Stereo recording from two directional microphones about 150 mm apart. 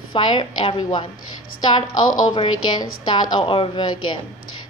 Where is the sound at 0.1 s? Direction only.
35° left (ahead or behind).